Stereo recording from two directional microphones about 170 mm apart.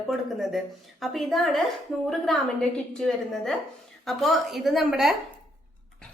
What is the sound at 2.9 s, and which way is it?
A woman's voice, centre (ahead or behind).